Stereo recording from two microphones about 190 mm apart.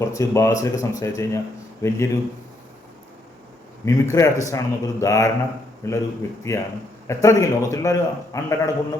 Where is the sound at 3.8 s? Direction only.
15° left (ahead or behind).